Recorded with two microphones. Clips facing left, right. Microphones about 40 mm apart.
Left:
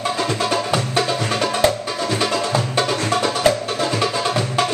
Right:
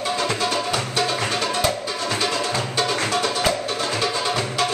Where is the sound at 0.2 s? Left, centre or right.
Centre.